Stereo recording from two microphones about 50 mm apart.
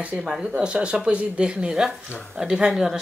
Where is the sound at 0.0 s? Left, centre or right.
Right.